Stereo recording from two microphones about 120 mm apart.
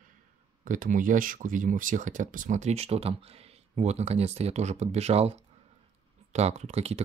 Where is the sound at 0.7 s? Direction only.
90° right.